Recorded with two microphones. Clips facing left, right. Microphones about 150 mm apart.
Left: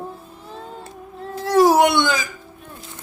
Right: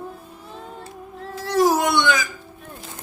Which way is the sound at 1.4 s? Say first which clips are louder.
Left 4 dB; 55° left (ahead or behind).